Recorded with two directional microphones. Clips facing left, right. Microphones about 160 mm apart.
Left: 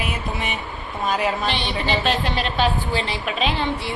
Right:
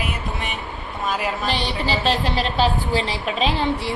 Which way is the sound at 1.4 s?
35° right (ahead or behind).